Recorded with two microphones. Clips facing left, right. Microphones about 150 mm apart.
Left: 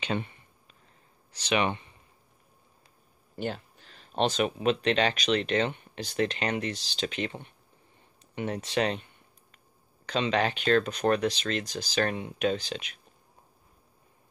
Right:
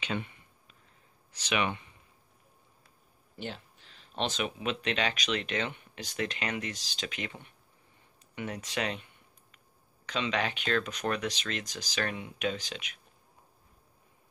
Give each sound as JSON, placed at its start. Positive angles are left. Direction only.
{"t": 0.0, "sound": "a sound", "side_deg": 35}
{"t": 1.3, "sound": "speech", "side_deg": 30}
{"t": 3.3, "sound": "speech", "side_deg": 45}
{"t": 10.0, "sound": "speech", "side_deg": 35}